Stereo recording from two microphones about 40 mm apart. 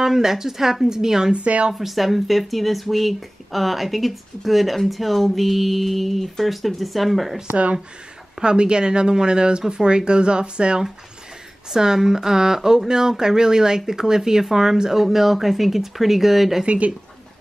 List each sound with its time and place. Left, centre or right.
0.0 s speech: centre
1.3 s speech: right
1.7 s speech: centre
7.4 s speech: right
8.4 s speech: right
11.7 s speech: centre
16.6 s speech: right